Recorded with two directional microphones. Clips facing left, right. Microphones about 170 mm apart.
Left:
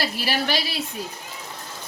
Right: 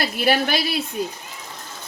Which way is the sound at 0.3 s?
50° right (ahead or behind).